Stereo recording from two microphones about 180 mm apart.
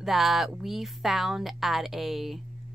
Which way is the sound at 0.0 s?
Centre (ahead or behind).